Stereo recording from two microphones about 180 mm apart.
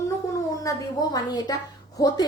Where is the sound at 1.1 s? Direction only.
20° left (ahead or behind).